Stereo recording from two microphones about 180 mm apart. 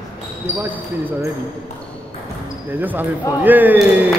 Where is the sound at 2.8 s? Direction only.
10° right (ahead or behind).